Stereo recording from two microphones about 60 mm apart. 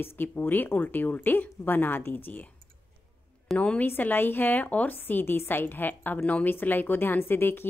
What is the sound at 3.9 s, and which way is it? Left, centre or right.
A woman's voice, left.